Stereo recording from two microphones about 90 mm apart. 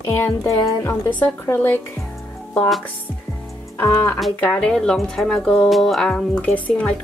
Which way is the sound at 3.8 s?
40° left (ahead or behind).